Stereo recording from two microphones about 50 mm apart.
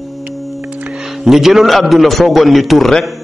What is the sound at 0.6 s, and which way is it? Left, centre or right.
Music, right.